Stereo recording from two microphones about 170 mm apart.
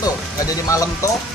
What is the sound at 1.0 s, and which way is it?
Speech, 20° left (ahead or behind).